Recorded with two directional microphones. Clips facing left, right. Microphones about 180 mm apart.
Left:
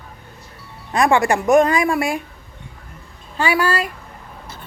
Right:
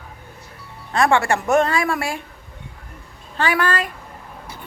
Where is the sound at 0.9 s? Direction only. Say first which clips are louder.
Left 2 dB; 15° left (ahead or behind).